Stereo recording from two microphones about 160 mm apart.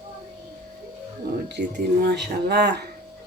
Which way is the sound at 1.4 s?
90° right.